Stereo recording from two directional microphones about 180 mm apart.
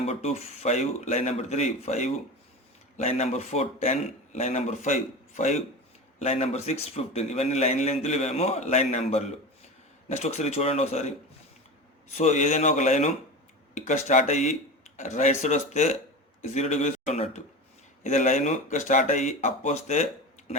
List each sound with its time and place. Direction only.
0.0 s a man's voice: 35° left (ahead or behind)
12.1 s a man's voice: 40° left (ahead or behind)